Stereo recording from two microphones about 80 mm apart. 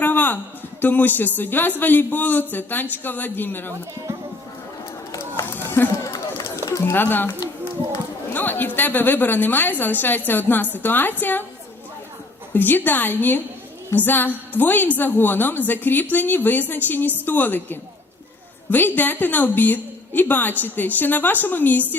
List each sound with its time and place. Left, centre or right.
0.0 s a sound: left
0.8 s a woman's voice: left
5.5 s run: left
6.1 s run: left
6.9 s a woman's voice: left
8.3 s a woman's voice: left
12.5 s a woman's voice: left